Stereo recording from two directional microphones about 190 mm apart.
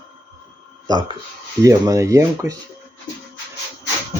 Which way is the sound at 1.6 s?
20° right (ahead or behind).